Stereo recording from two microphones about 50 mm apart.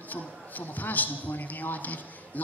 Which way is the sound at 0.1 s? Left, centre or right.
Left.